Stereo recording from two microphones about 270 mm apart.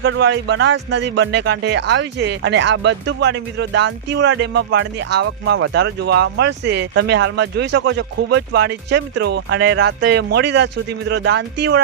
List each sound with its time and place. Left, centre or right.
0.0 s speech: right